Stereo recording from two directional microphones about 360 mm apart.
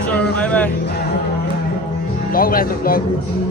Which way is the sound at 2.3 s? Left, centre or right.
Left.